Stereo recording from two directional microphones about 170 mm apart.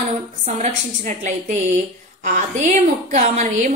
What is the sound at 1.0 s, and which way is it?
A woman's voice, 45° right (ahead or behind).